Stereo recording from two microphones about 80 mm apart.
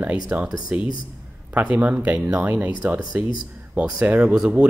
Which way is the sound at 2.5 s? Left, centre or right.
Right.